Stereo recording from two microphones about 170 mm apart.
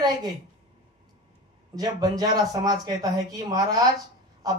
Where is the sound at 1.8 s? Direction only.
20° right (ahead or behind).